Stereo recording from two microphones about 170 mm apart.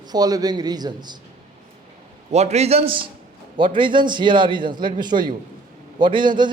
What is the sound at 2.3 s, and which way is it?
A man's voice, 40° right (ahead or behind).